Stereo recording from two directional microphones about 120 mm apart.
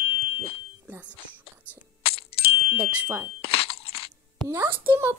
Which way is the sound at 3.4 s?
50° left (ahead or behind).